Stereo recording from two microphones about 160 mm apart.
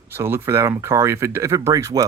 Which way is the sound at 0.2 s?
15° right (ahead or behind).